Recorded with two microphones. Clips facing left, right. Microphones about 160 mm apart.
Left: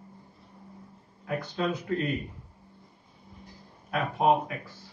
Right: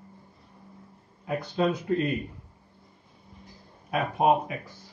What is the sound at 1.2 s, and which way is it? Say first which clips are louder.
Speech: right 4 dB; 20° right (ahead or behind).